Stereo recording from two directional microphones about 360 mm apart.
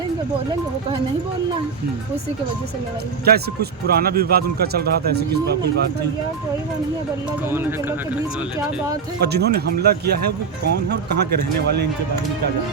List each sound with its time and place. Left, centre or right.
3.2 s speech: right
7.5 s speech: centre
9.2 s speech: right